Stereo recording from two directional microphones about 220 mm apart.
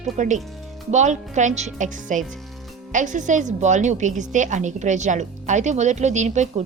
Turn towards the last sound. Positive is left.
turn(degrees=-35)  # may be behind; listen again after turning